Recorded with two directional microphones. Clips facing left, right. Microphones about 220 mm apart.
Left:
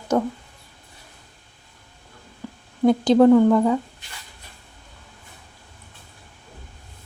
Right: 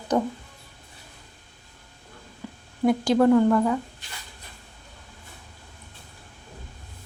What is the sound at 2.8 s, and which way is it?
Speech, 25° left (ahead or behind).